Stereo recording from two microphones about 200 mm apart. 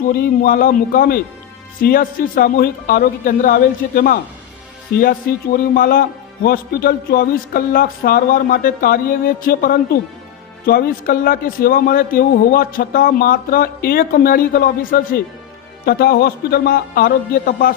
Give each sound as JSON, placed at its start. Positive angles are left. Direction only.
{"t": 0.1, "sound": "a man's voice", "side_deg": 45}
{"t": 5.7, "sound": "a man's voice", "side_deg": 45}